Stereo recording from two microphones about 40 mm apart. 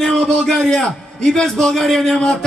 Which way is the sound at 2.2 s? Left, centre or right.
Centre.